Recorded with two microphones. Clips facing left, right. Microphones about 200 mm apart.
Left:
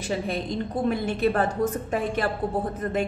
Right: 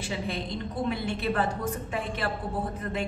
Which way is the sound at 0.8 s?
45° left (ahead or behind).